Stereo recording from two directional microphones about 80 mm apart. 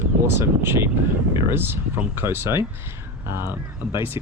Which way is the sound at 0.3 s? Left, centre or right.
Right.